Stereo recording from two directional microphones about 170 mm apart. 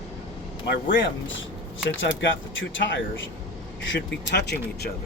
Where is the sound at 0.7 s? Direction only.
90° left.